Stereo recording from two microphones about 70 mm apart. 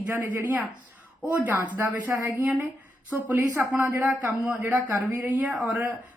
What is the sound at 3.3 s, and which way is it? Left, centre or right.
Speech, right.